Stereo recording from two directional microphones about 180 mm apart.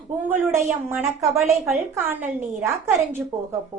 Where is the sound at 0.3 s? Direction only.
10° right (ahead or behind).